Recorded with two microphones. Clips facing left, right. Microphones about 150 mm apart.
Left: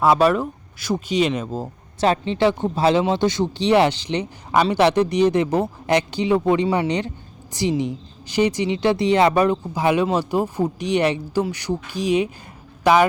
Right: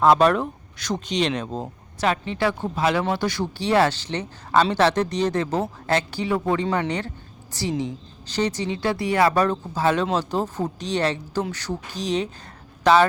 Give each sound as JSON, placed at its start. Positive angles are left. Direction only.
{"t": 0.0, "sound": "speech", "side_deg": 5}
{"t": 2.0, "sound": "speech", "side_deg": 25}